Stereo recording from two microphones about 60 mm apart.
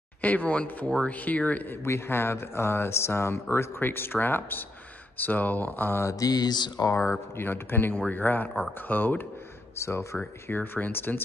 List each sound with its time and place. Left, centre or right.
0.2 s speech: left
1.9 s speech: left
6.0 s mantra: left
7.1 s speech: left
9.8 s speech: left
10.5 s speech: left